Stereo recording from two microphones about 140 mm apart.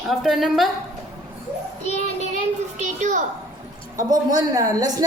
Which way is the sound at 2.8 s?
60° right (ahead or behind).